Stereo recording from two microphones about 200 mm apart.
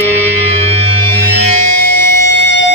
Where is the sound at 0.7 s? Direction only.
90° left.